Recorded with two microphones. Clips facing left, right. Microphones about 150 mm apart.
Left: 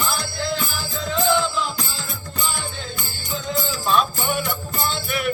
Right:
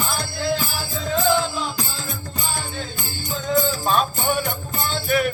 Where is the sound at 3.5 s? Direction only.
45° right (ahead or behind).